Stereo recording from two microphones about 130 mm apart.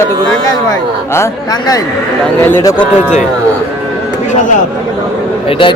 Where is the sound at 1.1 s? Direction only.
30° left (ahead or behind).